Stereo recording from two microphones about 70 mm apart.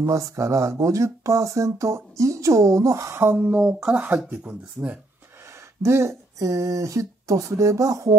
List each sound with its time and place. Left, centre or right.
0.0 s speech: right
3.5 s speech: centre
5.8 s speech: right